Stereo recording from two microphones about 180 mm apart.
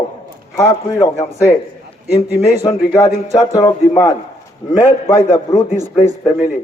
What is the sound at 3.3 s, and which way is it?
A man's voice, 20° left (ahead or behind).